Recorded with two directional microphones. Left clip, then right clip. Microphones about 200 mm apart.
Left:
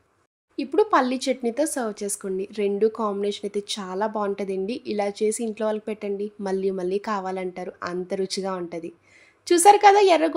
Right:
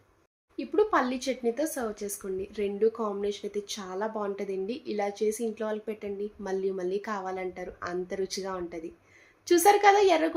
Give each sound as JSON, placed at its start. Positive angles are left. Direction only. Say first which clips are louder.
{"t": 0.5, "sound": "speech", "louder": "left 5 dB", "side_deg": 55}